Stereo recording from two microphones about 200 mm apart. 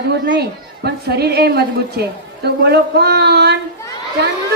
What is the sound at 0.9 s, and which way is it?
A woman's voice, 55° right (ahead or behind).